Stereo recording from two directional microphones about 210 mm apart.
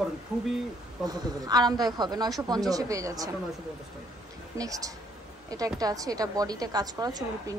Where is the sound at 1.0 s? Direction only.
20° right (ahead or behind).